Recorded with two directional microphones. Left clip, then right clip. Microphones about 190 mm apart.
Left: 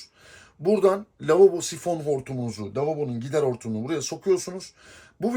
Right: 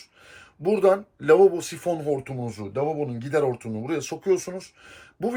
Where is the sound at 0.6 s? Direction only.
Centre (ahead or behind).